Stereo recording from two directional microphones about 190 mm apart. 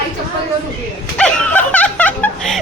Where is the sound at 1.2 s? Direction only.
5° left (ahead or behind).